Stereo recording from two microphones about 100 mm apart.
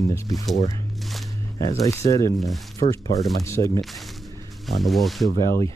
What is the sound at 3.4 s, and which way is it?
Speech, 30° left (ahead or behind).